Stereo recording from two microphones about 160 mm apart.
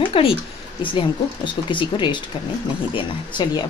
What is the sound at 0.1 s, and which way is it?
Speech, 35° left (ahead or behind).